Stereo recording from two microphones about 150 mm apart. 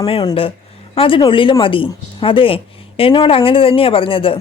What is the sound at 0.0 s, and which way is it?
A woman's voice, 40° left (ahead or behind).